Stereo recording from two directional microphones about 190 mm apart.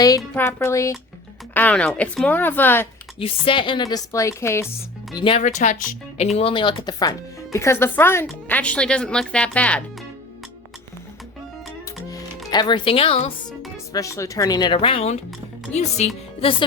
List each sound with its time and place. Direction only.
0.3 s speech: 15° left (ahead or behind)
3.2 s a woman's voice: 30° left (ahead or behind)
5.1 s a woman's voice: 25° left (ahead or behind)
5.4 s speech: 40° left (ahead or behind)
6.3 s speech: 25° left (ahead or behind); by 9.8 s 5° left (ahead or behind)
12.5 s a woman's voice: 20° left (ahead or behind)
13.9 s a woman's voice: 15° left (ahead or behind)